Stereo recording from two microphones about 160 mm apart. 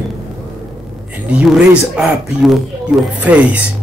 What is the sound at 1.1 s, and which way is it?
Speech, 5° right (ahead or behind).